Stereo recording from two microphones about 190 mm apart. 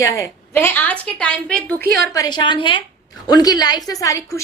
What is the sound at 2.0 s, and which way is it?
A woman's voice, 20° left (ahead or behind).